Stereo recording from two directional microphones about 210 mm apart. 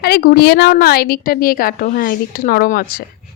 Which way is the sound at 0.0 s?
45° left (ahead or behind).